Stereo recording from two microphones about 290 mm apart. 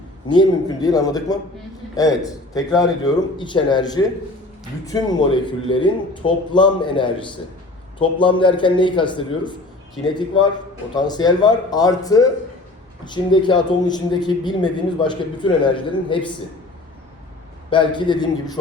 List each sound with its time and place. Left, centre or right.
0.3 s a man's voice: centre
17.7 s a man's voice: centre